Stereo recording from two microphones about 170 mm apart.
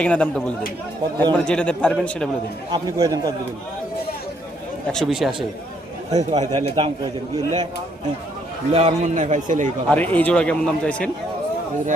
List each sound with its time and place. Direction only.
0.0 s a man's voice: 5° left (ahead or behind)
2.7 s speech: 20° right (ahead or behind)
4.9 s speech: centre (ahead or behind)
6.1 s speech: 40° right (ahead or behind)
8.7 s a man's voice: 40° right (ahead or behind)
9.9 s a man's voice: 10° left (ahead or behind)